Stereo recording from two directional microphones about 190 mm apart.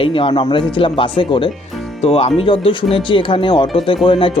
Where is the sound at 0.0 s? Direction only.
25° left (ahead or behind).